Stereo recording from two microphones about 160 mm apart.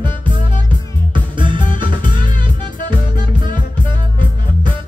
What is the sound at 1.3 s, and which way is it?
Music, 30° right (ahead or behind).